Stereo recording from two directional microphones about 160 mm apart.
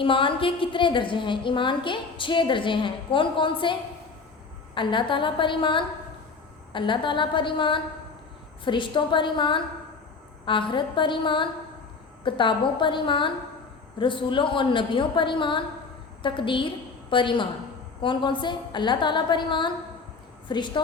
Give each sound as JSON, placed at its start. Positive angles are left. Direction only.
{"t": 0.0, "sound": "a woman's voice", "side_deg": 30}